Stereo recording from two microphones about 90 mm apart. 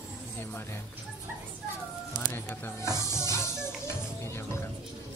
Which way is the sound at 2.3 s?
25° left (ahead or behind).